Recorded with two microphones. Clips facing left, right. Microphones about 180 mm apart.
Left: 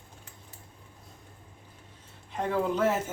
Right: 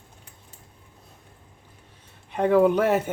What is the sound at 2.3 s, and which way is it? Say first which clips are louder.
Speech: right 10 dB; 65° right (ahead or behind).